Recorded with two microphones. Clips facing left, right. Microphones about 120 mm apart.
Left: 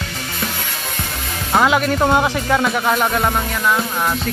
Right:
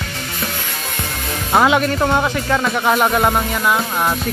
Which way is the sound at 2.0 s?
20° left (ahead or behind).